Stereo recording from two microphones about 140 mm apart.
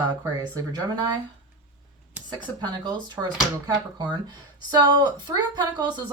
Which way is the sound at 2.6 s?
30° right (ahead or behind).